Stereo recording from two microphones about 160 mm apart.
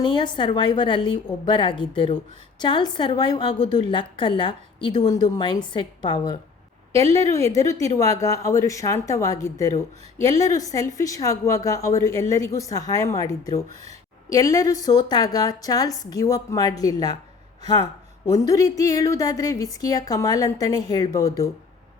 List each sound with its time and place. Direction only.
0.0 s a woman's voice: 30° left (ahead or behind)
7.1 s a woman's voice: 20° left (ahead or behind)